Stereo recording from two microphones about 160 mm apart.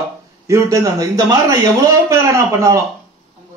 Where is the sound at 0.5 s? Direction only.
20° right (ahead or behind).